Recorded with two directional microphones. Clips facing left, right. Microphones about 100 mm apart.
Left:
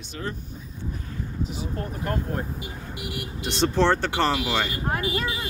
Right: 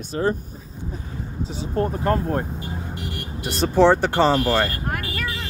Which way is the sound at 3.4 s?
5° right (ahead or behind).